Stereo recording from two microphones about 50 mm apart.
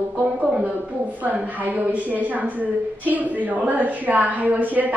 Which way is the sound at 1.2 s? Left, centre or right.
Right.